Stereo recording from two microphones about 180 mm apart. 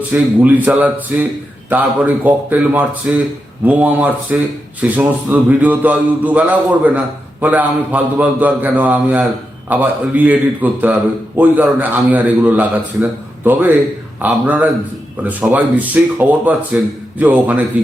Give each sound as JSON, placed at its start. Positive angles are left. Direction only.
{"t": 0.1, "sound": "speech", "side_deg": -10}